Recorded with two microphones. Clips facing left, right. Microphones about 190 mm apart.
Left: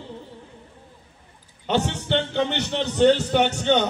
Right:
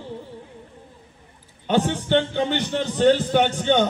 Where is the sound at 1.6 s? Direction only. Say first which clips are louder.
Right 2 dB; 50° right (ahead or behind).